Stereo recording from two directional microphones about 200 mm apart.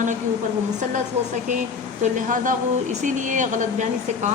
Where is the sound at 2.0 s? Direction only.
40° right (ahead or behind).